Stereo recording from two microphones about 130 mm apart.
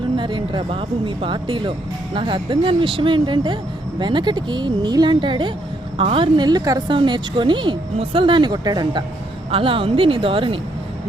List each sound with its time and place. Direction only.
0.2 s a woman's voice: 40° right (ahead or behind)